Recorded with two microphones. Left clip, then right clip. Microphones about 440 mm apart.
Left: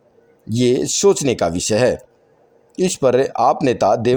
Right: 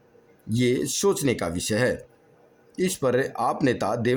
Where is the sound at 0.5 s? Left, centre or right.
Right.